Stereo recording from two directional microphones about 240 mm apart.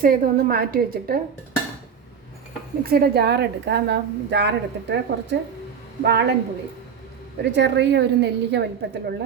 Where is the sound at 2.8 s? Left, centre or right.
Right.